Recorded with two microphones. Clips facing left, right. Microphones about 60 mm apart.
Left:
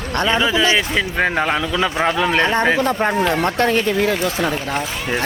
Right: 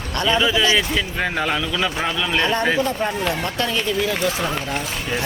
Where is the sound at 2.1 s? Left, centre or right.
Left.